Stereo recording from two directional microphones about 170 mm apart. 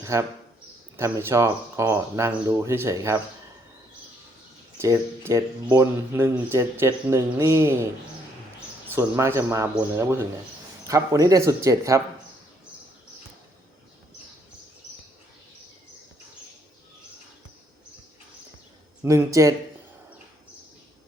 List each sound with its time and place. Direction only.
0.0 s speech: 15° right (ahead or behind)
4.8 s speech: 15° right (ahead or behind)
8.9 s speech: 15° right (ahead or behind)
19.0 s speech: 20° right (ahead or behind)